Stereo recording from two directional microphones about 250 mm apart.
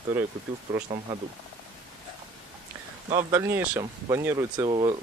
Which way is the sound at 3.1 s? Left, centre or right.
Centre.